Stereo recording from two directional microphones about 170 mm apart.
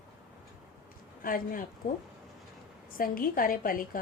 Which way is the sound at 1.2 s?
55° left (ahead or behind).